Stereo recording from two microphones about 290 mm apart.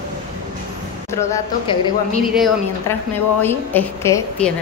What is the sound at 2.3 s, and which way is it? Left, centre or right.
A woman's voice, centre.